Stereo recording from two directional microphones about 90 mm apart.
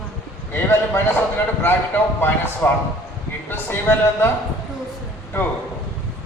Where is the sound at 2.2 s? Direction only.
25° left (ahead or behind).